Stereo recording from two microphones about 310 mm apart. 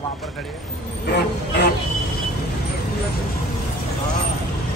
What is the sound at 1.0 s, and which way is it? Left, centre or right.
Speech, left.